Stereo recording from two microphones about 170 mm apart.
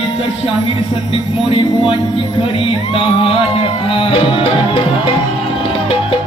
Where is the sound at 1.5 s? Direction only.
30° left (ahead or behind).